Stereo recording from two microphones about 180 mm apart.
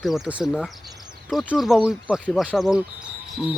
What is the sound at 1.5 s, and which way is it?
Speech, centre (ahead or behind).